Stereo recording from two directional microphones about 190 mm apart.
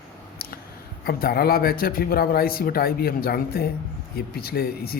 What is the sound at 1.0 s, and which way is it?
A man's voice, 55° left (ahead or behind).